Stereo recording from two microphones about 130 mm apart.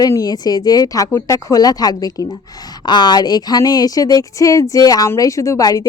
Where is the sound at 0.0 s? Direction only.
30° left (ahead or behind).